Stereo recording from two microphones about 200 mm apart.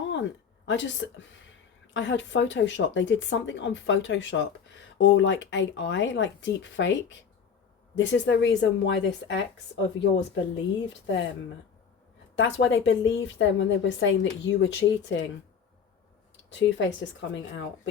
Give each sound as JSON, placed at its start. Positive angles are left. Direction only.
{"t": 0.1, "sound": "speech", "side_deg": 65}
{"t": 7.9, "sound": "speech", "side_deg": 65}
{"t": 12.4, "sound": "speech", "side_deg": 65}
{"t": 16.5, "sound": "speech", "side_deg": 65}